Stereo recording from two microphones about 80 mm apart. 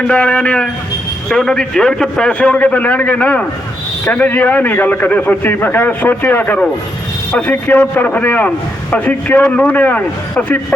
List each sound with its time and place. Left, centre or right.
0.1 s a man's voice: centre